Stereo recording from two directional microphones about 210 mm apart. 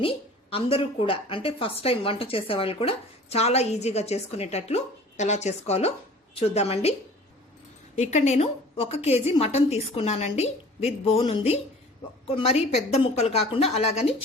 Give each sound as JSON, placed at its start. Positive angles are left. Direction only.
{"t": 0.5, "sound": "a woman's voice", "side_deg": 25}
{"t": 7.9, "sound": "a woman's voice", "side_deg": 35}